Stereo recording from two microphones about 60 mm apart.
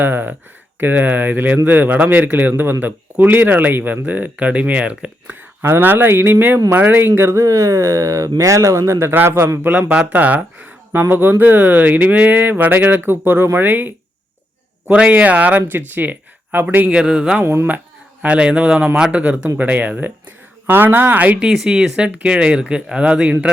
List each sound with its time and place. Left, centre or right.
0.0 s speech: right
5.6 s speech: right
7.4 s speech: right
9.9 s speech: right
16.9 s speech: centre
17.4 s speech: right
18.2 s speech: centre
21.4 s speech: centre